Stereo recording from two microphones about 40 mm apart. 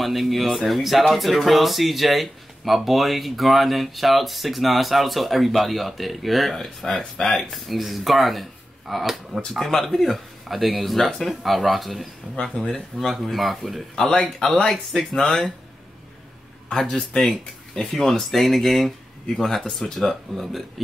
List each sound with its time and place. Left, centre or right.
0.0 s speech: centre
7.5 s speech: centre
16.7 s speech: centre
17.8 s speech: left
18.3 s speech: centre